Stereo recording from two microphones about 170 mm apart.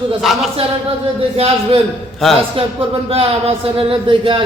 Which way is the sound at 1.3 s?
35° right (ahead or behind).